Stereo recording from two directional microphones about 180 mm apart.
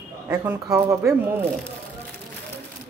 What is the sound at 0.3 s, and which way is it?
Speech, 15° right (ahead or behind).